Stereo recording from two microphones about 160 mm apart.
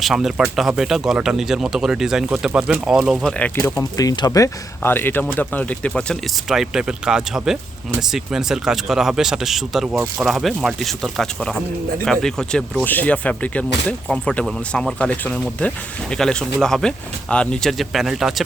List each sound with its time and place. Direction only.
0.0 s speech: centre (ahead or behind)
3.3 s speech: 10° left (ahead or behind)
3.6 s speech: 20° left (ahead or behind); by 18.4 s centre (ahead or behind)